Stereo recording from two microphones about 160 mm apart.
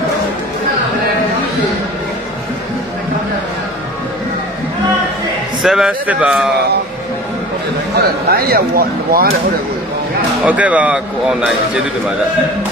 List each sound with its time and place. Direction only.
5.6 s a man's voice: 5° right (ahead or behind)
8.3 s speech: 70° right (ahead or behind)
10.4 s speech: 10° right (ahead or behind)